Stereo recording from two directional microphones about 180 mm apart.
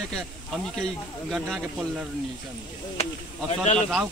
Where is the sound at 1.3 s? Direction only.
Centre (ahead or behind).